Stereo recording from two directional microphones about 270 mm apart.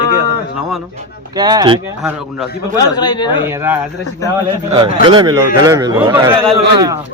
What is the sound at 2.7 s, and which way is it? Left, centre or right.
Speech, centre.